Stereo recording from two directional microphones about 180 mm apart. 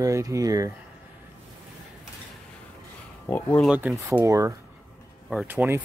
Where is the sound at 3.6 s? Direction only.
5° right (ahead or behind).